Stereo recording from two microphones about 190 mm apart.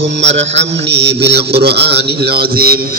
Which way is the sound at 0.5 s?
60° right (ahead or behind).